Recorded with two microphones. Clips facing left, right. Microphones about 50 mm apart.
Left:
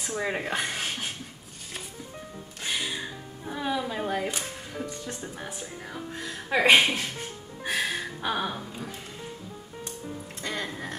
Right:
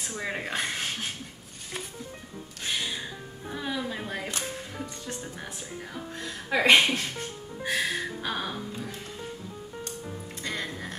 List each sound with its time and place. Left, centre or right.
0.1 s music: centre
2.6 s music: centre
3.4 s speech: centre
7.6 s music: left
7.9 s music: centre
10.5 s music: centre